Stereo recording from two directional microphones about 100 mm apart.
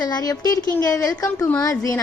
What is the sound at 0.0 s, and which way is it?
A woman's voice, 40° left (ahead or behind).